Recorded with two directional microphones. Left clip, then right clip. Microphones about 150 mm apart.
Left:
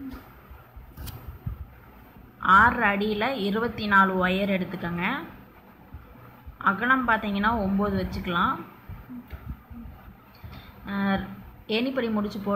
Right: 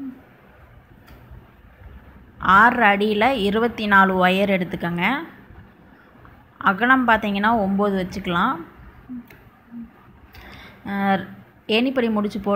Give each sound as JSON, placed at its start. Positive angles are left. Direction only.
{"t": 2.4, "sound": "a woman's voice", "side_deg": -45}
{"t": 6.6, "sound": "a woman's voice", "side_deg": -45}
{"t": 10.9, "sound": "a woman's voice", "side_deg": -45}